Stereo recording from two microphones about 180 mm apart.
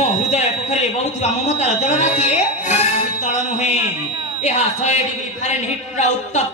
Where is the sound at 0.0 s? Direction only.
40° left (ahead or behind).